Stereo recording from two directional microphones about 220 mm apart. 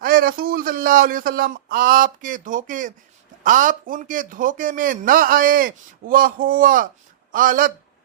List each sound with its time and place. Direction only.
0.0 s a man's voice: 40° right (ahead or behind)